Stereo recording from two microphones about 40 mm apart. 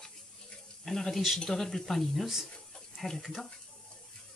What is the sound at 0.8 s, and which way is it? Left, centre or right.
Speech, centre.